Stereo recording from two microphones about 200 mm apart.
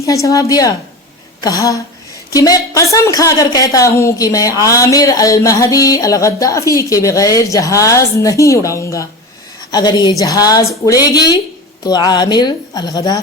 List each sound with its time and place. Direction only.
0.0 s a woman's voice: 15° left (ahead or behind)
1.4 s a sound: 20° left (ahead or behind)
2.3 s a woman's voice: 20° left (ahead or behind)